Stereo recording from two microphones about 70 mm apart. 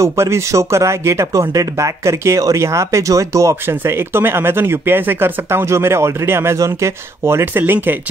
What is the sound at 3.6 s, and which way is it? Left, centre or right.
Speech, right.